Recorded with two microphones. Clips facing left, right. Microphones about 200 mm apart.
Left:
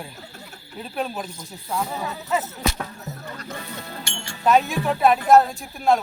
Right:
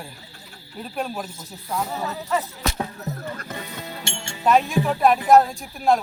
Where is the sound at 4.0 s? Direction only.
25° right (ahead or behind).